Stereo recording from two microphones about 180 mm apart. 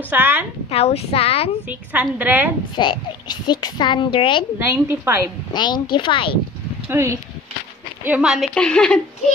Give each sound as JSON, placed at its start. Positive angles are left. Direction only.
{"t": 0.1, "sound": "a woman's voice", "side_deg": -10}
{"t": 0.7, "sound": "speech", "side_deg": 35}
{"t": 1.7, "sound": "a woman's voice", "side_deg": -10}
{"t": 2.7, "sound": "a child's voice", "side_deg": 25}
{"t": 4.6, "sound": "a woman's voice", "side_deg": -15}
{"t": 5.5, "sound": "a child's voice", "side_deg": 25}
{"t": 6.9, "sound": "a woman's voice", "side_deg": -15}